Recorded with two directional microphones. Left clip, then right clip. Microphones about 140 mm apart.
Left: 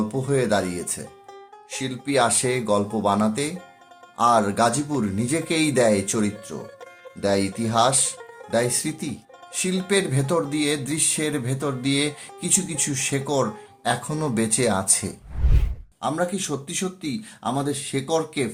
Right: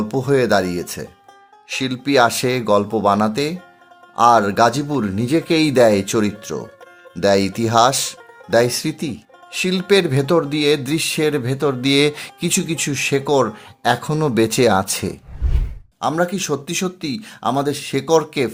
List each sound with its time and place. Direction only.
0.1 s speech: 75° right (ahead or behind)
7.2 s speech: 90° right; by 15.1 s 65° right (ahead or behind)
16.0 s speech: 90° right